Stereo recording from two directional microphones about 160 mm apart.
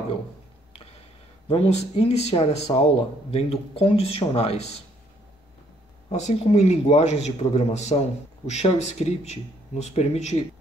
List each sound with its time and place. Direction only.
1.5 s speech: 40° left (ahead or behind)
6.1 s speech: 45° left (ahead or behind)